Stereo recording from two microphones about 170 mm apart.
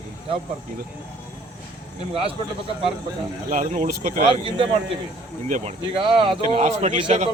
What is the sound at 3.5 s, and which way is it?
Speech, 50° right (ahead or behind).